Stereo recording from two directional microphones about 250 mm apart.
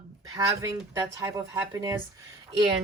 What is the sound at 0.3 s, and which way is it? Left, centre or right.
Speech, centre.